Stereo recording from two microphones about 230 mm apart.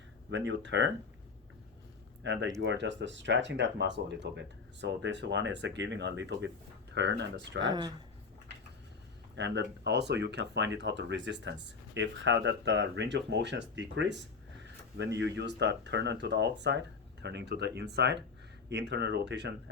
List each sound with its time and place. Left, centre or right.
0.3 s speech: right
2.2 s speech: right
7.7 s speech: centre
9.3 s speech: right